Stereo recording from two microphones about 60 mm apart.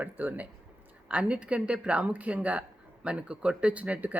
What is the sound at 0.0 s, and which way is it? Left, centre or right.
Speech, right.